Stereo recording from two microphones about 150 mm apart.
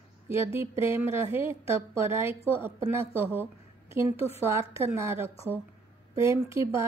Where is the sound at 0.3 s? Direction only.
15° right (ahead or behind).